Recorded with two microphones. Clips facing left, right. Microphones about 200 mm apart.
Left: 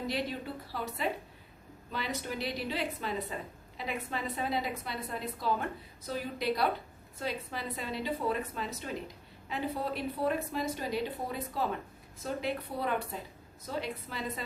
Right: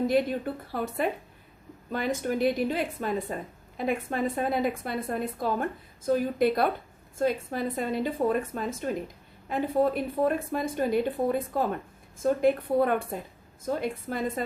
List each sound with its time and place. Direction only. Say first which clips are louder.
0.1 s a woman's voice: right 9 dB; 50° right (ahead or behind)